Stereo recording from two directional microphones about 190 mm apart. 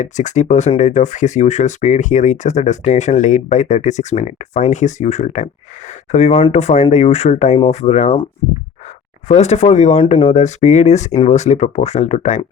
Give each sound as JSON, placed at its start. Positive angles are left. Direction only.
{"t": 0.0, "sound": "speech", "side_deg": 40}
{"t": 9.2, "sound": "speech", "side_deg": 35}